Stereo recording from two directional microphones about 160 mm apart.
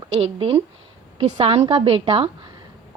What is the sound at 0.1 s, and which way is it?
A woman's voice, 35° right (ahead or behind).